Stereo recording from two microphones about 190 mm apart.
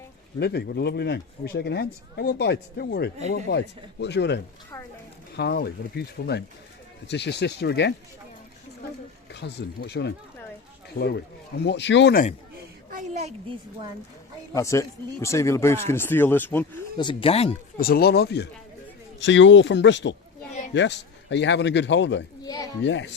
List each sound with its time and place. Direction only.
0.3 s speech: 60° left (ahead or behind)
5.4 s speech: 60° left (ahead or behind)
9.3 s speech: 60° left (ahead or behind)
11.6 s speech: 65° left (ahead or behind)
12.9 s a woman's voice: 35° right (ahead or behind)
14.5 s speech: 15° left (ahead or behind)
17.0 s speech: 25° left (ahead or behind)
17.7 s speech: 50° left (ahead or behind)
19.2 s speech: 75° left (ahead or behind)
22.4 s a child's voice: 20° left (ahead or behind)
22.8 s speech: 70° left (ahead or behind)